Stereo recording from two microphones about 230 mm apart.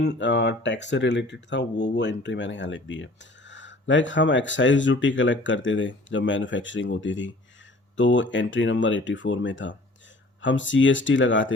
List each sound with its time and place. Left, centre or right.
0.0 s speech: left